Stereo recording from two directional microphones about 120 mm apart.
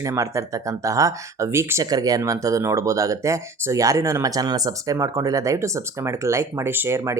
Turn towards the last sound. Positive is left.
turn(degrees=-25)  # may be behind; listen again after turning